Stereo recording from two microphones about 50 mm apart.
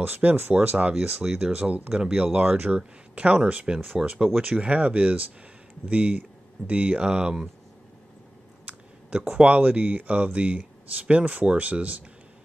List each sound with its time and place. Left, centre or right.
0.0 s speech: right
0.6 s speech: right
0.9 s speech: centre
1.6 s speech: right
2.0 s speech: centre
2.4 s speech: right
2.7 s speech: right
4.0 s speech: centre
4.4 s speech: right
8.7 s a sound: right
9.3 s speech: right